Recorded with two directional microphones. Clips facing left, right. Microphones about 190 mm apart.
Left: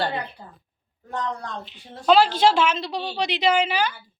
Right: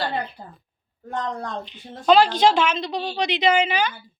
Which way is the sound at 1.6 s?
5° left (ahead or behind).